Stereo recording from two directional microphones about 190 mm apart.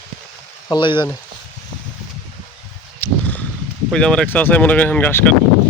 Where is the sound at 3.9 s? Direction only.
5° left (ahead or behind).